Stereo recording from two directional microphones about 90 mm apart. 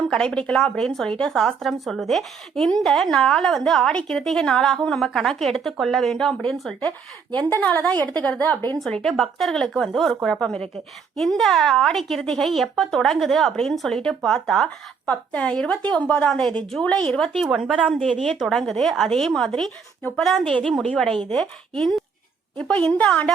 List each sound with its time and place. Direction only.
0.1 s a woman's voice: 10° left (ahead or behind)
7.3 s a woman's voice: 20° left (ahead or behind)
9.0 s a woman's voice: centre (ahead or behind)
11.3 s a woman's voice: centre (ahead or behind)